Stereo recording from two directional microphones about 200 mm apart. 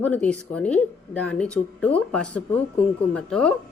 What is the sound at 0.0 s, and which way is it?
Speech, 5° left (ahead or behind).